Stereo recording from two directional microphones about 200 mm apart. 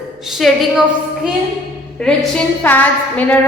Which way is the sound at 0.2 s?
Centre (ahead or behind).